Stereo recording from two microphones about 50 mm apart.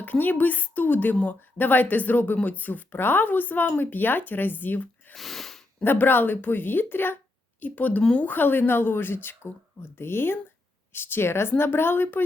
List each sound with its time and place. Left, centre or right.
0.0 s a woman's voice: left
5.1 s sneeze: centre
5.8 s speech: left
7.6 s a woman's voice: left